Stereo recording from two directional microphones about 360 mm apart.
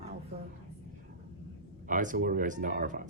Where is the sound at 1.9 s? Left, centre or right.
Right.